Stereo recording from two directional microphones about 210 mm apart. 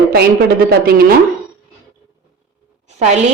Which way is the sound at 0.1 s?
50° right (ahead or behind).